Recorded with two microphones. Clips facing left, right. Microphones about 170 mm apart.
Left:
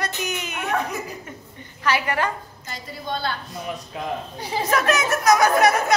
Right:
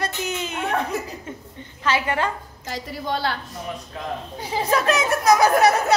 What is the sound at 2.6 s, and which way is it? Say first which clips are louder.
Speech: right 4 dB; 90° right.